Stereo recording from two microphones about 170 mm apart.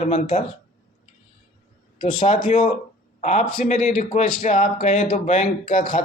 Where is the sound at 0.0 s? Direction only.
45° left (ahead or behind).